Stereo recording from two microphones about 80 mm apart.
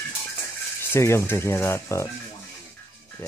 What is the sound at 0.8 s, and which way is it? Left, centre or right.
Speech, left.